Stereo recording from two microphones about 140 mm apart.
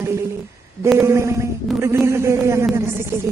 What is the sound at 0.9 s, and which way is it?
Speech, 20° right (ahead or behind).